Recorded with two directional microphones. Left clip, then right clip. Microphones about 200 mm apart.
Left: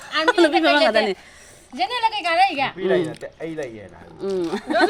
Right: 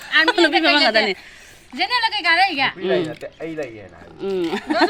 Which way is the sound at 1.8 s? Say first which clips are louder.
Right 2 dB; 5° left (ahead or behind).